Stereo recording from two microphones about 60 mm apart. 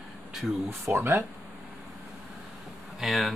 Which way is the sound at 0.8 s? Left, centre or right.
Right.